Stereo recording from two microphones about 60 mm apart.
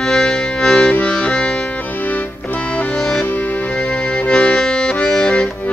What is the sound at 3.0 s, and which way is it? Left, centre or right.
Music, centre.